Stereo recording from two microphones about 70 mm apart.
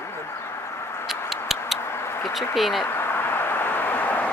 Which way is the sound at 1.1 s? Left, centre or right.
Centre.